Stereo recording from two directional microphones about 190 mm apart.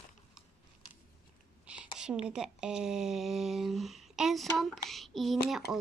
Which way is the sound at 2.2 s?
5° right (ahead or behind).